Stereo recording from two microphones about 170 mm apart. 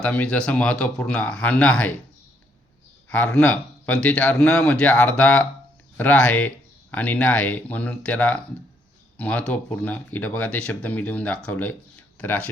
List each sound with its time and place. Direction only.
0.0 s speech: 10° left (ahead or behind)
3.1 s speech: 5° left (ahead or behind)